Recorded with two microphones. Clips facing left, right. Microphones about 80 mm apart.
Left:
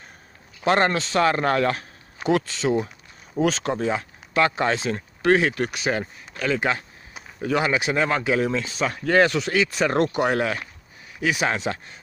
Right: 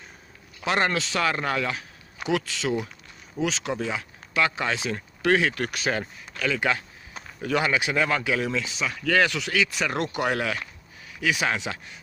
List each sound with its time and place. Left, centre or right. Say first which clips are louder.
0.7 s speech: left 4 dB; left
3.3 s speech: left 5 dB; left